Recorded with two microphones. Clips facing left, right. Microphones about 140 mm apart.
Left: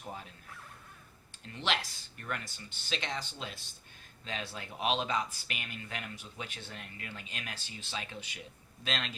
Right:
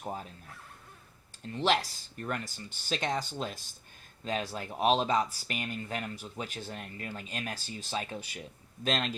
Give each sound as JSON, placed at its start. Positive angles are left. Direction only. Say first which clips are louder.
{"t": 0.0, "sound": "speech", "louder": "right 6 dB", "side_deg": -40}
{"t": 1.5, "sound": "speech", "louder": "right 7 dB", "side_deg": -35}